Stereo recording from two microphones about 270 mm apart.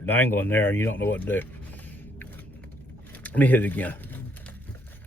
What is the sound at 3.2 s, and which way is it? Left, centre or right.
Speech, centre.